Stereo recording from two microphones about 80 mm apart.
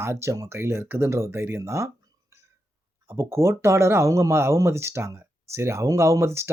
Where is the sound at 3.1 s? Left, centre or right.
Right.